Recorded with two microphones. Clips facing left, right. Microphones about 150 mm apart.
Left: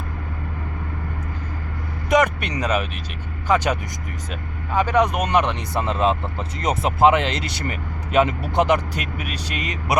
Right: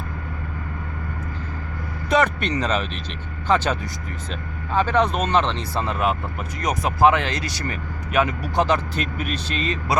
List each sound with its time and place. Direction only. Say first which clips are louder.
2.0 s speech: left 1 dB; 15° left (ahead or behind)